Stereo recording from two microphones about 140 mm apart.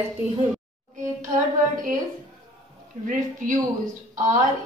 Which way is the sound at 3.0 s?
65° right (ahead or behind).